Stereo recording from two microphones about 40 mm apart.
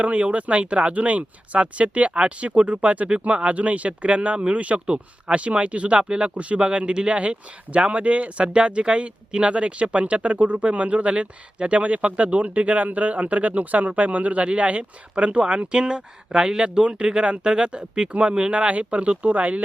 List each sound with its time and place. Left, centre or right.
0.0 s speech: right